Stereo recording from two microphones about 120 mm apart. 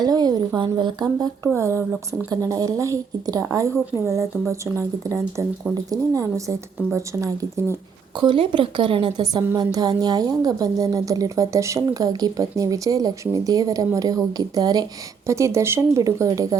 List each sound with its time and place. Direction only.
0.0 s speech: 35° right (ahead or behind)
1.5 s speech: 25° right (ahead or behind)
8.2 s speech: 40° right (ahead or behind)
9.7 s speech: 30° right (ahead or behind)